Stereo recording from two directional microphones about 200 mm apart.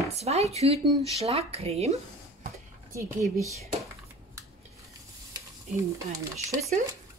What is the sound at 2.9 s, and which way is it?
Speech, 15° right (ahead or behind).